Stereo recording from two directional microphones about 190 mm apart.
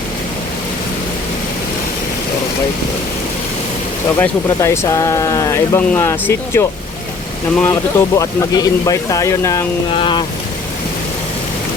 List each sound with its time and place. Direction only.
4.2 s speech: 15° left (ahead or behind)
9.9 s vehicle: 25° left (ahead or behind)